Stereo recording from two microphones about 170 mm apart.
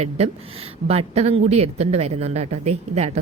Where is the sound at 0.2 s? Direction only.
40° right (ahead or behind).